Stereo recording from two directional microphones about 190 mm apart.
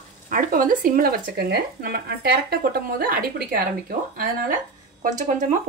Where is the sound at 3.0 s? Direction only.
50° right (ahead or behind).